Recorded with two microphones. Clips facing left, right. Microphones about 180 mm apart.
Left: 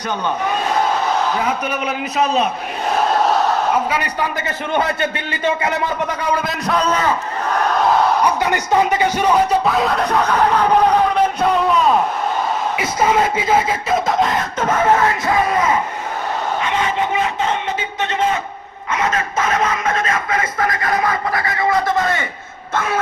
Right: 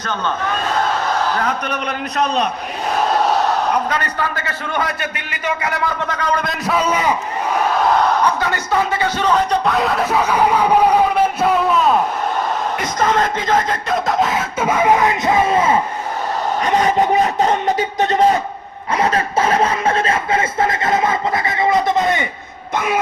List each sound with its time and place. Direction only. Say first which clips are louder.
1.4 s a man's voice: left 1 dB; 5° left (ahead or behind)
8.2 s speech: left 1 dB; 15° left (ahead or behind); by 15.8 s 25° right (ahead or behind)
16.6 s speech: right 7 dB; 40° right (ahead or behind)
18.9 s a sound: right 3 dB; 35° right (ahead or behind); by 23.0 s 15° right (ahead or behind)